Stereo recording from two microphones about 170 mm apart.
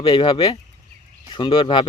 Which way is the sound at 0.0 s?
30° left (ahead or behind).